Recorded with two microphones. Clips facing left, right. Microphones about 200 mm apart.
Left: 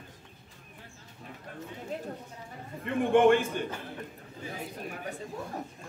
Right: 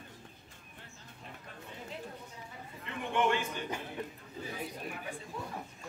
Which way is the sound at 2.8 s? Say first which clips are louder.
Left 10 dB; 50° left (ahead or behind).